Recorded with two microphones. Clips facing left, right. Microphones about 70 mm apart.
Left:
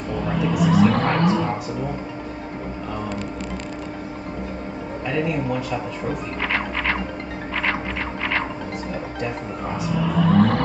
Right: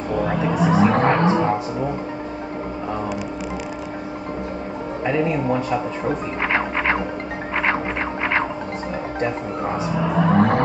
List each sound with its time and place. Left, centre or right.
0.1 s music: right
5.0 s speech: right
6.5 s music: right
9.8 s speech: right